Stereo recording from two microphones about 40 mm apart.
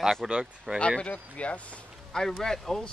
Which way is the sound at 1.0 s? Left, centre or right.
Left.